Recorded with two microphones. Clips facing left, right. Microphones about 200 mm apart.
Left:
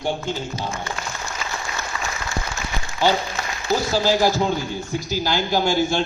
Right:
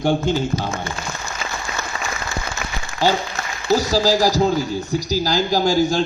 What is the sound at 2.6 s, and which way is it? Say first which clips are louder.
Applause: right 1 dB; 70° right (ahead or behind).